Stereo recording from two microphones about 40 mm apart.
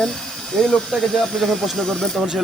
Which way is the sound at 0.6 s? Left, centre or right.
Centre.